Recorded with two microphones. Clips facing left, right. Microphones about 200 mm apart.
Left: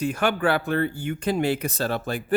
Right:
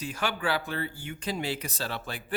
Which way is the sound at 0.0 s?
55° left (ahead or behind).